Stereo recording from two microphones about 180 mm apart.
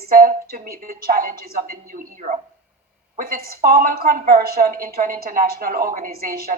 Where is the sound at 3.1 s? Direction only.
55° right (ahead or behind).